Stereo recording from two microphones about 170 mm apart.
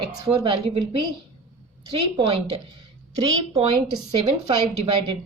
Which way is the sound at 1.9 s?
30° right (ahead or behind).